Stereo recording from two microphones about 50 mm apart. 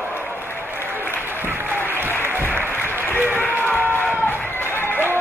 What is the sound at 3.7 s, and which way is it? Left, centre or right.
Crowd, left.